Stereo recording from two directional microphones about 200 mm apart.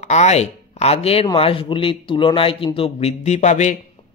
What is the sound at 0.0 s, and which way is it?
A man's voice, 35° left (ahead or behind).